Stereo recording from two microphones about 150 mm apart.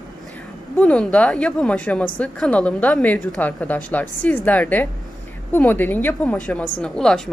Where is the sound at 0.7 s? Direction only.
5° left (ahead or behind).